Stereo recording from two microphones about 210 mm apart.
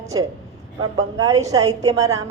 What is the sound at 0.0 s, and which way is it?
Speech, 15° right (ahead or behind).